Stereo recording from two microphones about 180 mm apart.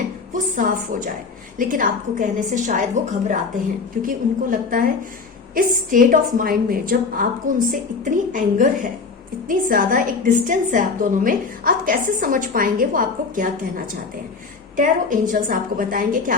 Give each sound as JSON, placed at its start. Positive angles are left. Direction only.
{"t": 0.3, "sound": "a woman's voice", "side_deg": -50}